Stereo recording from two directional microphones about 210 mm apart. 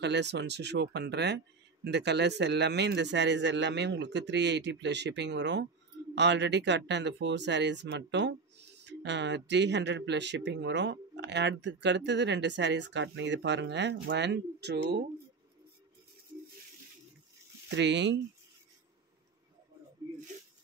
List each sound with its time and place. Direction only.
0.0 s speech: 55° right (ahead or behind)
17.6 s speech: 55° right (ahead or behind)